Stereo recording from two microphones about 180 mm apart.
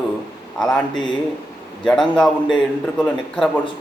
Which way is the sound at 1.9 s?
5° left (ahead or behind).